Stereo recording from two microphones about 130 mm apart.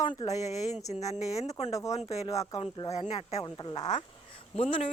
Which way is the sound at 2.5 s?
40° left (ahead or behind).